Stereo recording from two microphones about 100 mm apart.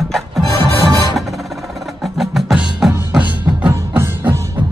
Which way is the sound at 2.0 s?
Centre (ahead or behind).